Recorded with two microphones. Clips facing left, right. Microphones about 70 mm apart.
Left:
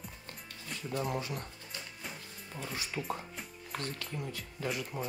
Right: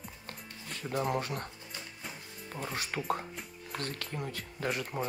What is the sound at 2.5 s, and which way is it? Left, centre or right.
Speech, right.